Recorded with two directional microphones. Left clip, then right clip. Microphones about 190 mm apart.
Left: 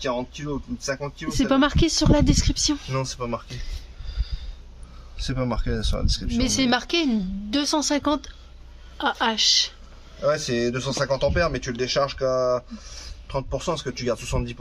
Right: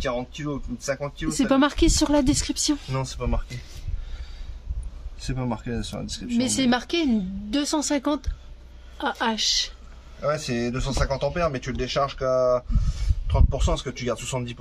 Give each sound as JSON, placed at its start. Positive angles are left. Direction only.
{"t": 0.0, "sound": "a woman's voice", "side_deg": 0}
{"t": 1.3, "sound": "speech", "side_deg": -10}
{"t": 2.9, "sound": "speech", "side_deg": 10}
{"t": 5.2, "sound": "speech", "side_deg": 20}
{"t": 6.3, "sound": "a woman's voice", "side_deg": -5}
{"t": 10.2, "sound": "speech", "side_deg": 15}